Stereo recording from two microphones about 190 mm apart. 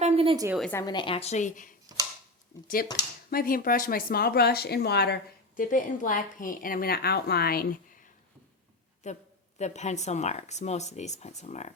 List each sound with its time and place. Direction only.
0.0 s a sound: 30° right (ahead or behind)
0.7 s speech: 20° left (ahead or behind); by 1.7 s 40° left (ahead or behind)
2.8 s speech: 50° left (ahead or behind)
9.0 s speech: 40° left (ahead or behind)